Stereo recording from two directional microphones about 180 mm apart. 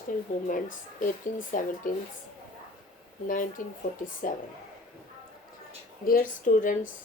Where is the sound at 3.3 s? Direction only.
50° left (ahead or behind).